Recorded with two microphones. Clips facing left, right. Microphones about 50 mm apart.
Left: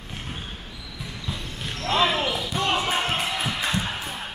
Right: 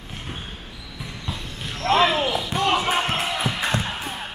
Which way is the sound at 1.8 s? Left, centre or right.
Right.